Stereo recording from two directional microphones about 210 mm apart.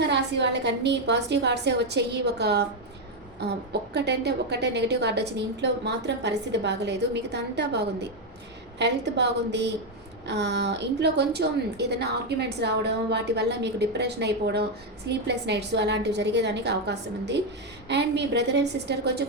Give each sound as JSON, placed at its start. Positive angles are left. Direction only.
{"t": 0.1, "sound": "a woman's voice", "side_deg": -55}